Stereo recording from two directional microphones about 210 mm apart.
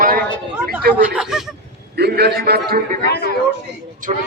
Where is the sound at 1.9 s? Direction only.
50° right (ahead or behind).